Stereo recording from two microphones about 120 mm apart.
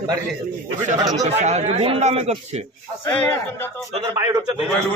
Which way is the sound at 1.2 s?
70° right (ahead or behind).